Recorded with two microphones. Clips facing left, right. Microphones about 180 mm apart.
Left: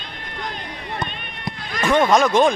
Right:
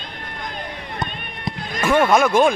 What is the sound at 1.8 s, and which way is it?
Speech, 10° right (ahead or behind).